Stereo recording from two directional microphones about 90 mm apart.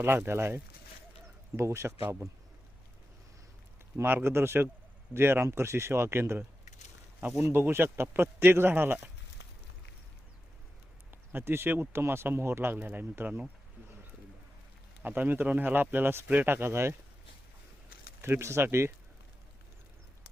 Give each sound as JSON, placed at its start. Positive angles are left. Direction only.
{"t": 0.0, "sound": "a man's voice", "side_deg": -25}
{"t": 3.9, "sound": "speech", "side_deg": -25}
{"t": 11.1, "sound": "speech", "side_deg": -25}
{"t": 15.0, "sound": "speech", "side_deg": -20}
{"t": 18.2, "sound": "speech", "side_deg": -30}